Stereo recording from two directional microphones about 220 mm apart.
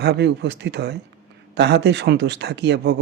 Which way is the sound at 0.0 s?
50° right (ahead or behind).